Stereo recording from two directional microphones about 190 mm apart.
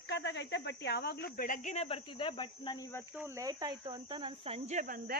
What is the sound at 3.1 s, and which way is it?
Speech, 10° right (ahead or behind).